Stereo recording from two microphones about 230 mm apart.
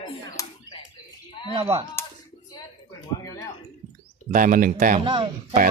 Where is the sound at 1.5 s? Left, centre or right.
Right.